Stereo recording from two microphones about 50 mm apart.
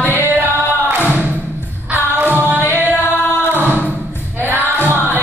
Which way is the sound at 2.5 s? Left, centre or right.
Left.